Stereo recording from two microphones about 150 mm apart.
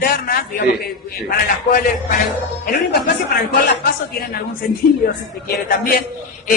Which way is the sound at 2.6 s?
90° left.